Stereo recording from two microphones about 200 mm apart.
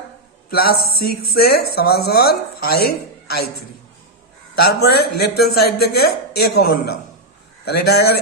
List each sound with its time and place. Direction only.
0.5 s speech: 50° left (ahead or behind)
4.5 s speech: 50° left (ahead or behind)